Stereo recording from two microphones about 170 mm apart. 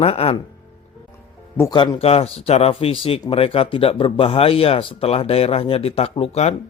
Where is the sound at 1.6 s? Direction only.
25° left (ahead or behind).